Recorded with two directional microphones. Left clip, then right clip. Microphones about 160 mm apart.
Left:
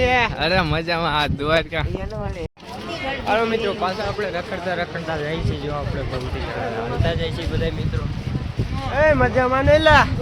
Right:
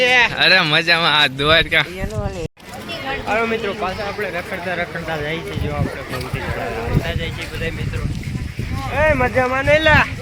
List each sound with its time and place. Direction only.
0.0 s a sound: 90° left
0.3 s speech: 5° left (ahead or behind)
3.2 s speech: 15° left (ahead or behind)
4.2 s speech: centre (ahead or behind)
7.1 s speech: 20° left (ahead or behind)
8.9 s speech: centre (ahead or behind)
9.8 s speech: 15° left (ahead or behind)